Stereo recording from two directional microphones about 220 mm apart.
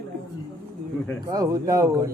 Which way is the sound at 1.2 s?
15° right (ahead or behind).